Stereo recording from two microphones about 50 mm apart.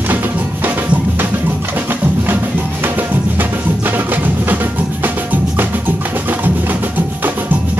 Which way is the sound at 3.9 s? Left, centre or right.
Right.